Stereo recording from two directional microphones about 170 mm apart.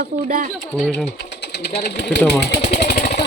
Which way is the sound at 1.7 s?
80° left.